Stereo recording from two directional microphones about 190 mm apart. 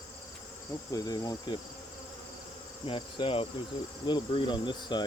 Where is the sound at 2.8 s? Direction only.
25° left (ahead or behind).